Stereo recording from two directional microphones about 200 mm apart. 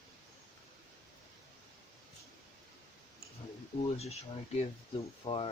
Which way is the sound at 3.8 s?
30° left (ahead or behind).